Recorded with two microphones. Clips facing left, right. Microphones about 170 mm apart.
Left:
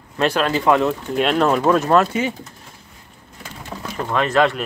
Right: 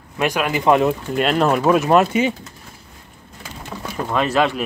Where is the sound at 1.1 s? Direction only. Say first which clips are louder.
Left 2 dB; centre (ahead or behind).